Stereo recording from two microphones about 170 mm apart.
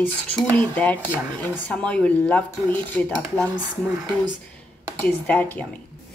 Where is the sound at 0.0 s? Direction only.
5° left (ahead or behind).